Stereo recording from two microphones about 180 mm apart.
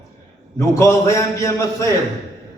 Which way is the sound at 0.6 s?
15° left (ahead or behind).